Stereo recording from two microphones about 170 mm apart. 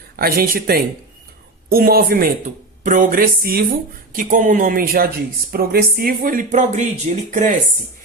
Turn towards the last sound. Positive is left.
turn(degrees=-45)  # may be behind; listen again after turning